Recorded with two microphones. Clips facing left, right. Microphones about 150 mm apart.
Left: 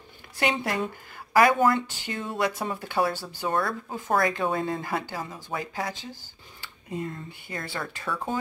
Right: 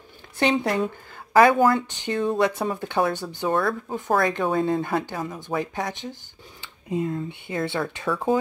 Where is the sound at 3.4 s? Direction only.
Centre (ahead or behind).